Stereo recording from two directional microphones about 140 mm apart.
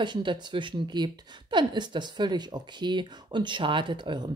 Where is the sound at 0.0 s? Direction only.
35° right (ahead or behind).